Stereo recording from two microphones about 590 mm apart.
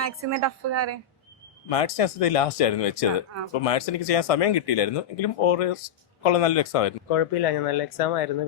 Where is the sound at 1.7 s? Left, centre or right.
Left.